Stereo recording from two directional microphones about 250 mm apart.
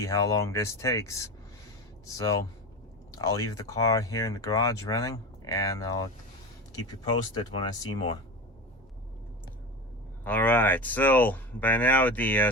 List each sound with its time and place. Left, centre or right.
0.0 s speech: centre
7.3 s speech: centre
10.2 s speech: centre